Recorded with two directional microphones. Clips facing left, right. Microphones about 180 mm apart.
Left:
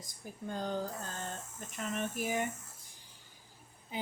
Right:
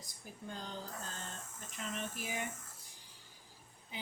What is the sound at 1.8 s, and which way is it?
Speech, 50° left (ahead or behind).